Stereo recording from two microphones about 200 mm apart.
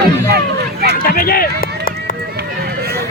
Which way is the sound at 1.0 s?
45° left (ahead or behind).